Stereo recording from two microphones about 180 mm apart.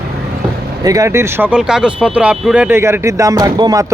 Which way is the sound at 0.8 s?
20° right (ahead or behind).